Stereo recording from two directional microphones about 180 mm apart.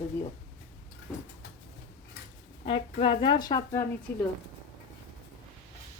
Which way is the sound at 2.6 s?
30° left (ahead or behind).